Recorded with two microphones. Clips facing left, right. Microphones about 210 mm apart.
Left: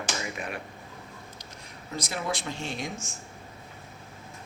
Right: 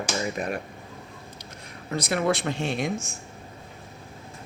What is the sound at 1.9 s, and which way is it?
Speech, 65° right (ahead or behind).